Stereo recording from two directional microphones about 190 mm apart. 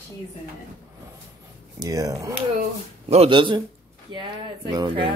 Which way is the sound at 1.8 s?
20° right (ahead or behind).